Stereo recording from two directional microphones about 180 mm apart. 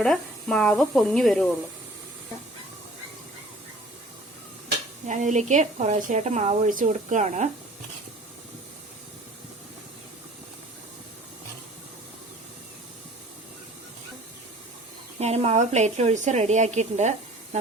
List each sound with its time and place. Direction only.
0.0 s speech: 5° left (ahead or behind)
5.0 s a woman's voice: 40° right (ahead or behind)
15.2 s a woman's voice: 35° right (ahead or behind)